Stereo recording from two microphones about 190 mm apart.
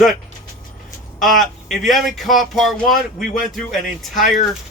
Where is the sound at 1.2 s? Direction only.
Centre (ahead or behind).